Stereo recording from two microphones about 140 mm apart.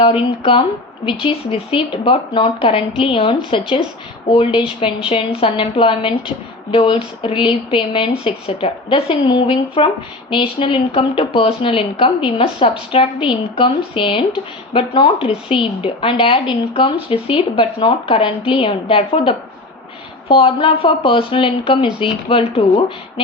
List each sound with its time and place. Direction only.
0.0 s a woman's voice: 40° left (ahead or behind)